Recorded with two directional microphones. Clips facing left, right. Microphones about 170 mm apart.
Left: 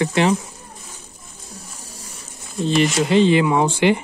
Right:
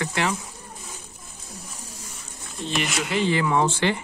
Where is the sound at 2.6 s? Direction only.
30° left (ahead or behind); by 3.9 s 15° left (ahead or behind).